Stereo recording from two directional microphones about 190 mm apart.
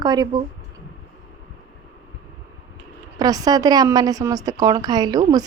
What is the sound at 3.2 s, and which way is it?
A woman's voice, 20° right (ahead or behind).